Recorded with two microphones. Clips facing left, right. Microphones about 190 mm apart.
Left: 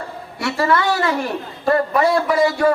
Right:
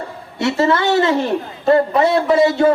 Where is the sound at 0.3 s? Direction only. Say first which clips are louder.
Right 3 dB; 25° right (ahead or behind).